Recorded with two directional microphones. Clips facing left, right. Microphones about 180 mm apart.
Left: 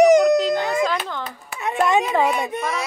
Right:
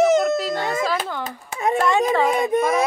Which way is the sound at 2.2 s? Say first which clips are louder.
Right 4 dB; 50° right (ahead or behind).